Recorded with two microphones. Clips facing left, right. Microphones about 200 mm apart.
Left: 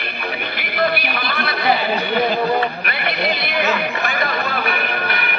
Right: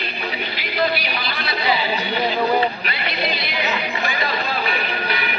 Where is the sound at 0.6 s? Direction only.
55° left (ahead or behind).